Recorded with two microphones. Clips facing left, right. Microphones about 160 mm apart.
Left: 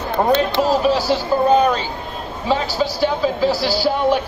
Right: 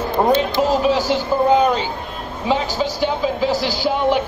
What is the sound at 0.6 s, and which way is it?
A man's voice, 15° right (ahead or behind).